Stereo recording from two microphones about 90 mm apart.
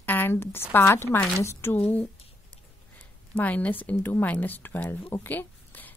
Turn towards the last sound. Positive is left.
turn(degrees=20)  # may be behind; listen again after turning